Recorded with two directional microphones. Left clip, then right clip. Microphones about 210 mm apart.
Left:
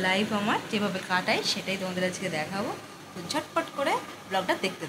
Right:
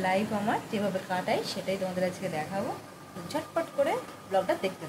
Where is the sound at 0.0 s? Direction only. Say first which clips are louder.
Left 2 dB; 10° right (ahead or behind).